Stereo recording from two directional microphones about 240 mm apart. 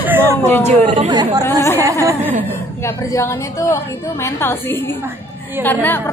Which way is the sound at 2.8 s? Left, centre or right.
Centre.